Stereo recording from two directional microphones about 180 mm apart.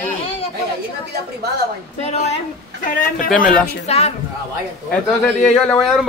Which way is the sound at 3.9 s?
35° left (ahead or behind).